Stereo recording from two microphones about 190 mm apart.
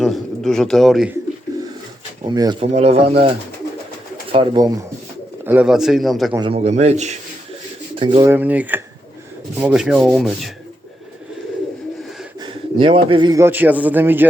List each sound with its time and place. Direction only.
0.0 s a sound: centre (ahead or behind)
2.2 s speech: 20° right (ahead or behind)
2.7 s a man's voice: 35° right (ahead or behind)
4.3 s speech: 25° right (ahead or behind)
5.5 s rub: 5° right (ahead or behind)
6.5 s a man's voice: 35° right (ahead or behind)
8.3 s a man's voice: 10° right (ahead or behind)
9.6 s rub: 5° right (ahead or behind)
12.4 s speech: 25° right (ahead or behind)
13.4 s a man's voice: 10° right (ahead or behind)